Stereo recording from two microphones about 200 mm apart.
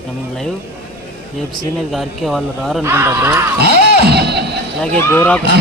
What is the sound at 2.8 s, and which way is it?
Speech, 10° right (ahead or behind).